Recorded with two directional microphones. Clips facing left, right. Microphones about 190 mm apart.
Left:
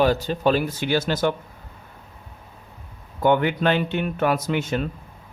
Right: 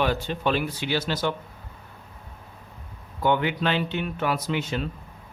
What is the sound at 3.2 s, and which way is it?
Speech, 50° left (ahead or behind).